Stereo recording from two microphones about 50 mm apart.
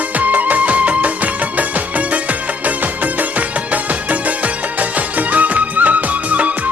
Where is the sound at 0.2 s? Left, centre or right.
Right.